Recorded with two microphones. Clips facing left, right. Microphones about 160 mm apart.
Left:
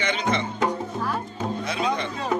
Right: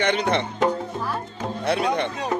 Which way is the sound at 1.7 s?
65° right (ahead or behind).